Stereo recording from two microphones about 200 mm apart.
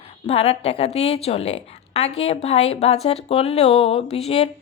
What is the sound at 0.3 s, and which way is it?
A woman's voice, 30° left (ahead or behind).